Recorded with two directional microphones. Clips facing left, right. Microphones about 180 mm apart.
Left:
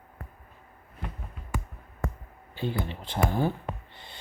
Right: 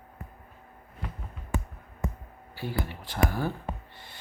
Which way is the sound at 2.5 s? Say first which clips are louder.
Left 2 dB; 20° left (ahead or behind).